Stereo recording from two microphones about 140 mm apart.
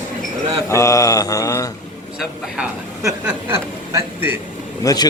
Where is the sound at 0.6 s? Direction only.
20° left (ahead or behind).